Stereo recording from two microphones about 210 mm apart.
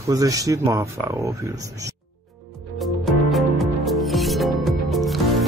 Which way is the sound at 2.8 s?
Centre (ahead or behind).